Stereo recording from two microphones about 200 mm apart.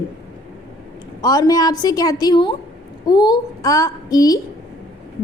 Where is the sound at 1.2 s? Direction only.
20° left (ahead or behind).